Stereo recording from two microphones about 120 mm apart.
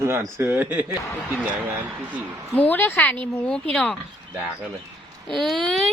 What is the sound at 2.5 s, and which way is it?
A woman's voice, 15° left (ahead or behind).